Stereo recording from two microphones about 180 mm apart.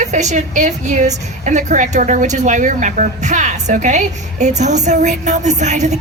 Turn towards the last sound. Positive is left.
turn(degrees=-40)  # may be behind; listen again after turning